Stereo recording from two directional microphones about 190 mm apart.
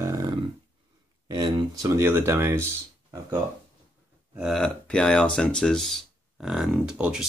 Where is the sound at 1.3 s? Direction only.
20° right (ahead or behind).